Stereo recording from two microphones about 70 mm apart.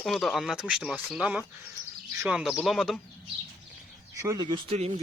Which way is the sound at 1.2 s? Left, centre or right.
Centre.